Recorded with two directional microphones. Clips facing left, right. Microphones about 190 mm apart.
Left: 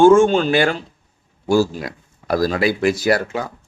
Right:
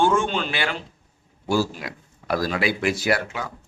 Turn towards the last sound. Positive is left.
turn(degrees=40)  # may be behind; listen again after turning